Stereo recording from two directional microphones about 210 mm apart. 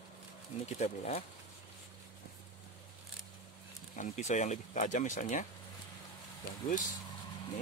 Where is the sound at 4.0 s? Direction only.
35° left (ahead or behind).